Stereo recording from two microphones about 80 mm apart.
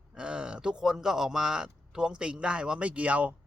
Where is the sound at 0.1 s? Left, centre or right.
Centre.